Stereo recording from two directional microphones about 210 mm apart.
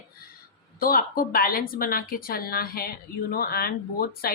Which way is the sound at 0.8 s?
45° left (ahead or behind).